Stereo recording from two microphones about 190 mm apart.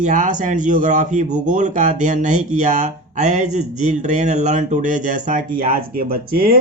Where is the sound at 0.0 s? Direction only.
40° right (ahead or behind).